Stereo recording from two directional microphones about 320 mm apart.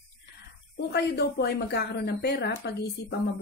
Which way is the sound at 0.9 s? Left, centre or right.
Left.